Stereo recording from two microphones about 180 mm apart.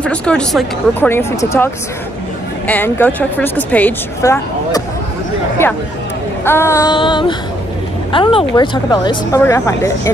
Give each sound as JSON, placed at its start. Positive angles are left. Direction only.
{"t": 0.0, "sound": "speech", "side_deg": 5}
{"t": 1.1, "sound": "a woman's voice", "side_deg": 15}
{"t": 6.4, "sound": "a woman's voice", "side_deg": 15}